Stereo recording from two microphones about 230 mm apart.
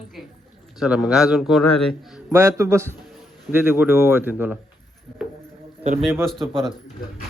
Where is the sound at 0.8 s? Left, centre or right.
Centre.